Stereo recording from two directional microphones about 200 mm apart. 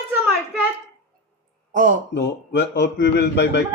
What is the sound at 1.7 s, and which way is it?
Speech, 45° right (ahead or behind).